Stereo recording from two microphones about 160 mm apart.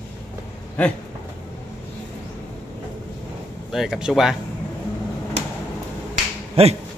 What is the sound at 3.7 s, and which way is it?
Speech, 5° right (ahead or behind).